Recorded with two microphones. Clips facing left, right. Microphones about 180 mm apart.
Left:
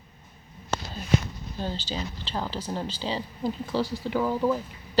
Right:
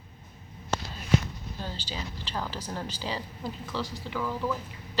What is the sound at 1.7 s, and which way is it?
Speech, 10° right (ahead or behind).